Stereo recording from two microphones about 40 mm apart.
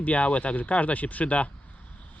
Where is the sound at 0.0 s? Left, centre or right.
Left.